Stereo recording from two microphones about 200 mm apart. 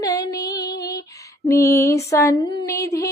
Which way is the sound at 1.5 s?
15° left (ahead or behind).